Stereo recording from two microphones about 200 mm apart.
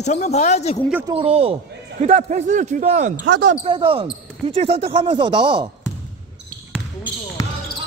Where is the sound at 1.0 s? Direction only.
30° right (ahead or behind).